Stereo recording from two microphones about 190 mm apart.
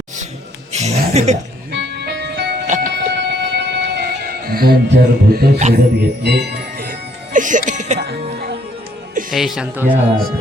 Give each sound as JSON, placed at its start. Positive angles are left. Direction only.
{"t": 0.7, "sound": "chuckle", "side_deg": -35}
{"t": 1.7, "sound": "music", "side_deg": -60}
{"t": 2.6, "sound": "music", "side_deg": -40}
{"t": 2.9, "sound": "music", "side_deg": -60}
{"t": 5.7, "sound": "speech", "side_deg": -60}
{"t": 7.3, "sound": "speech", "side_deg": -45}
{"t": 7.9, "sound": "speech", "side_deg": -60}
{"t": 9.3, "sound": "speech", "side_deg": 0}